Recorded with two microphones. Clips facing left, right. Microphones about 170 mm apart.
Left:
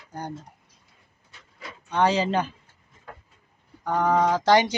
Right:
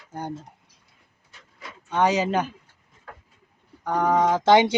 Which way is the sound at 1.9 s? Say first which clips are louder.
Right 1 dB; 10° right (ahead or behind).